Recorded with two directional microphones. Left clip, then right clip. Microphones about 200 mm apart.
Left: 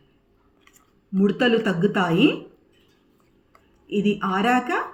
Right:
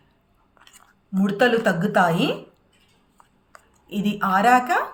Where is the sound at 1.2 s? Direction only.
50° right (ahead or behind).